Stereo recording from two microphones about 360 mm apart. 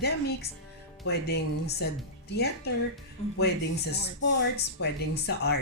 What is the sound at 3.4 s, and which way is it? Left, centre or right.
Speech, left.